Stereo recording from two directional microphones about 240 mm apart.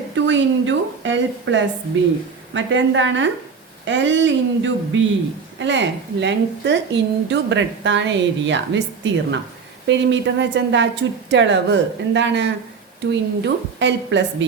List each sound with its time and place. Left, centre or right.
0.3 s a woman's voice: right